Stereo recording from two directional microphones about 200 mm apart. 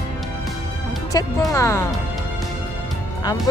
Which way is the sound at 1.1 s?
20° left (ahead or behind).